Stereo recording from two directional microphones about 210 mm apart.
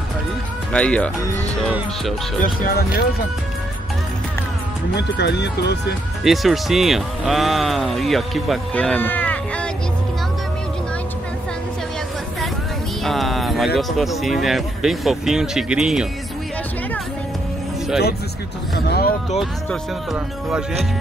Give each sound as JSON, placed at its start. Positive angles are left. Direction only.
{"t": 0.7, "sound": "speech", "side_deg": 5}
{"t": 2.4, "sound": "speech", "side_deg": 45}
{"t": 4.9, "sound": "speech", "side_deg": 55}
{"t": 6.2, "sound": "speech", "side_deg": 0}
{"t": 13.0, "sound": "music", "side_deg": 0}
{"t": 13.7, "sound": "speech", "side_deg": 0}
{"t": 18.8, "sound": "speech", "side_deg": 45}
{"t": 19.7, "sound": "speech", "side_deg": 0}